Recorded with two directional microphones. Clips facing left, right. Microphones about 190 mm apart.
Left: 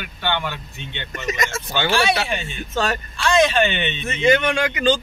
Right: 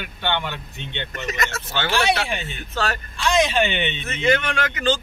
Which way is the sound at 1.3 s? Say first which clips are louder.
Left 4 dB; 15° left (ahead or behind).